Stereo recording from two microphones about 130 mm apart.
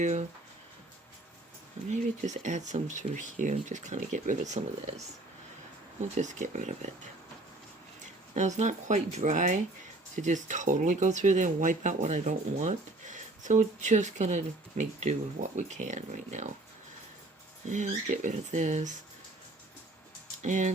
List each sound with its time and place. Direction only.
0.0 s speech: 65° right (ahead or behind)
1.9 s speech: 65° right (ahead or behind)
6.1 s speech: 70° right (ahead or behind)
8.3 s speech: 65° right (ahead or behind)
17.7 s speech: 70° right (ahead or behind)
20.4 s speech: 70° right (ahead or behind)